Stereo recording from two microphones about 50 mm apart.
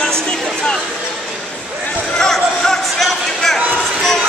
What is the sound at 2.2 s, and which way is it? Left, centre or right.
Speech, centre.